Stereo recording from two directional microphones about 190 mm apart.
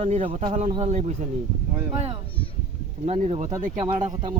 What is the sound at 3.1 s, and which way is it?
Speech, 35° right (ahead or behind).